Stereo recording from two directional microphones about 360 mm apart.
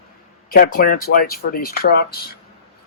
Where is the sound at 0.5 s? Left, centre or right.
Left.